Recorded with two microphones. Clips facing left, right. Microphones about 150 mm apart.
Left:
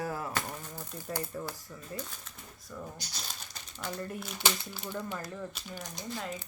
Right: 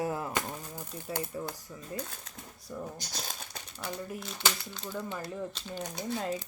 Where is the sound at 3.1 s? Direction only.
50° right (ahead or behind).